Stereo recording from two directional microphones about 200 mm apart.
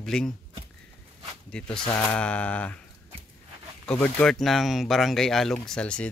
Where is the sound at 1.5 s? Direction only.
5° left (ahead or behind).